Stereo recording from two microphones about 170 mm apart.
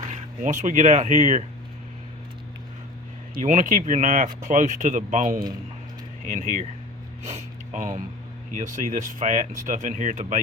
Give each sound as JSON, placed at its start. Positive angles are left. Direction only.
{"t": 0.1, "sound": "speech", "side_deg": -45}
{"t": 3.3, "sound": "speech", "side_deg": -50}